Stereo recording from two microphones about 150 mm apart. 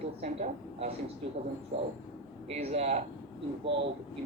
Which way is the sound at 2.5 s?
45° right (ahead or behind).